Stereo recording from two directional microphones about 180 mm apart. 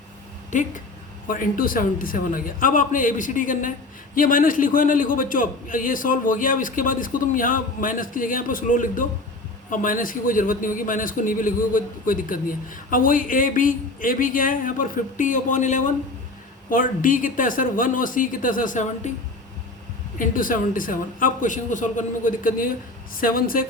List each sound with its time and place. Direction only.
0.5 s a man's voice: 45° left (ahead or behind)
20.1 s a man's voice: 50° left (ahead or behind)